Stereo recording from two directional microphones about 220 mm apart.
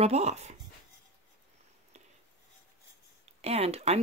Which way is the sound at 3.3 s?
30° right (ahead or behind).